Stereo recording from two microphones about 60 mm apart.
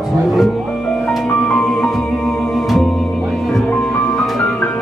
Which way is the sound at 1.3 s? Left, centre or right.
Centre.